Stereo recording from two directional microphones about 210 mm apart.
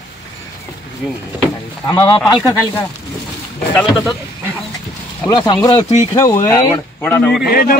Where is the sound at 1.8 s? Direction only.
10° left (ahead or behind).